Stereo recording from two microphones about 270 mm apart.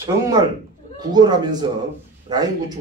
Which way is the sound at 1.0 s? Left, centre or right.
Centre.